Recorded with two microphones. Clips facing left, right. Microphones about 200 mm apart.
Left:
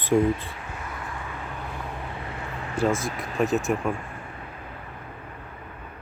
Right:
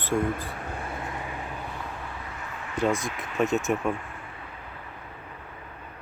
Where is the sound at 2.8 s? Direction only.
Centre (ahead or behind).